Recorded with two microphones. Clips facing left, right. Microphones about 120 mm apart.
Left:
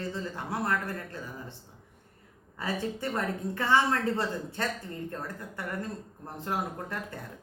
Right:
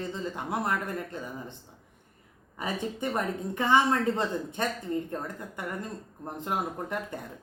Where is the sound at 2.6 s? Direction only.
20° right (ahead or behind).